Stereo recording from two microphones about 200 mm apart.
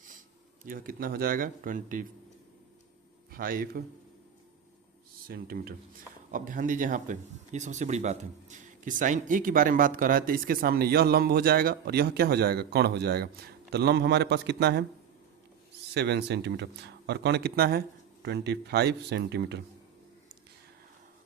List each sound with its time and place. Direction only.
0.6 s speech: 45° right (ahead or behind)
3.3 s speech: 45° right (ahead or behind)
5.3 s speech: 50° right (ahead or behind)
16.0 s speech: 55° right (ahead or behind)